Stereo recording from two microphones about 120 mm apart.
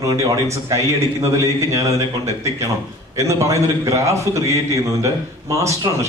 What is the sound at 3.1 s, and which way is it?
A man's voice, 25° right (ahead or behind).